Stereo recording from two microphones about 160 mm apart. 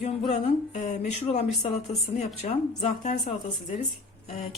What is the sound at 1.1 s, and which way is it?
Speech, 45° left (ahead or behind).